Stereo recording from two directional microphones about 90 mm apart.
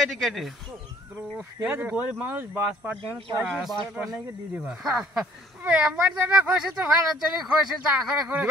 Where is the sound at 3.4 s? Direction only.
Centre (ahead or behind).